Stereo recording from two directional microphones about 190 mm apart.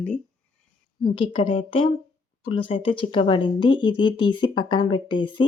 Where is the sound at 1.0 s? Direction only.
25° left (ahead or behind).